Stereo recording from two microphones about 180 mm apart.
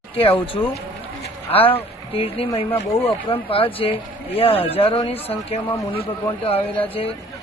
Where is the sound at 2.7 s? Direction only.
10° left (ahead or behind).